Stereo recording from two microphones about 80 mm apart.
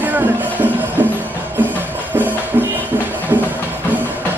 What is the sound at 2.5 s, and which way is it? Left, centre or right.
Music, right.